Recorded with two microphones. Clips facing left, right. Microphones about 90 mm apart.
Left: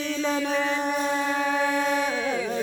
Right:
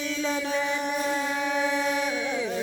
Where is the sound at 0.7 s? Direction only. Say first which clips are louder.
Left 2 dB; 35° left (ahead or behind).